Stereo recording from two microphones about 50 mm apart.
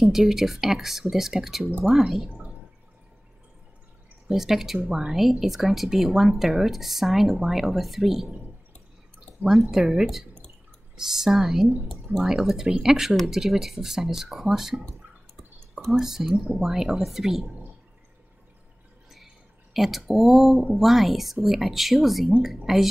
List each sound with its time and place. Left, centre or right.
0.0 s speech: centre
2.2 s drip: centre
4.3 s speech: centre
9.4 s speech: centre
11.0 s speech: centre
15.8 s speech: centre
19.7 s speech: centre